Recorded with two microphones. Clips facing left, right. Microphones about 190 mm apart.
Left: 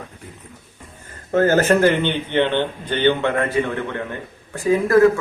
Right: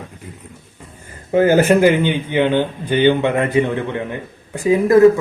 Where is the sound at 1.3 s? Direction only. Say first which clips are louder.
Right 3 dB; 10° right (ahead or behind).